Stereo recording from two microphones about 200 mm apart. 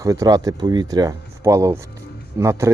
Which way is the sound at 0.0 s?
15° right (ahead or behind).